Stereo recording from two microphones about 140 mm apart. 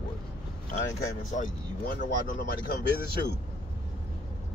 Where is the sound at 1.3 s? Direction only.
65° left (ahead or behind).